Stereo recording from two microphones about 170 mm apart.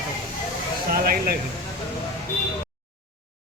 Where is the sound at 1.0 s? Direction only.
60° right (ahead or behind).